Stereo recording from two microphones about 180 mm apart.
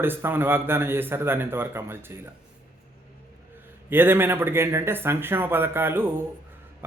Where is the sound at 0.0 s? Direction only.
10° right (ahead or behind).